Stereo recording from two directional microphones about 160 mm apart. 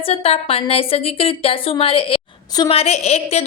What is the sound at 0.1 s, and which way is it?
A woman's voice, 40° left (ahead or behind).